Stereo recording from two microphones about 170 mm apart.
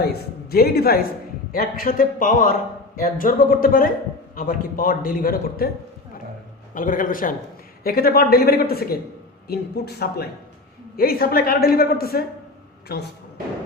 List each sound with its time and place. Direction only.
0.0 s a man's voice: 70° left (ahead or behind)
6.7 s a man's voice: 55° left (ahead or behind); by 13.0 s 70° left (ahead or behind)